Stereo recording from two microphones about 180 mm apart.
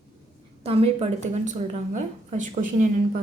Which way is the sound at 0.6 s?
35° right (ahead or behind).